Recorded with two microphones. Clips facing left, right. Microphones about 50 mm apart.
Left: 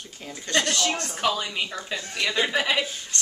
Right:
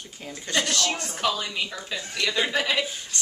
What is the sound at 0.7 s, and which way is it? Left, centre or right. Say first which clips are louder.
Speech: left 1 dB; centre.